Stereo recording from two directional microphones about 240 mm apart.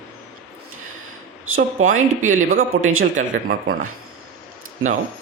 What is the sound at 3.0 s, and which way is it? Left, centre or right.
Speech, right.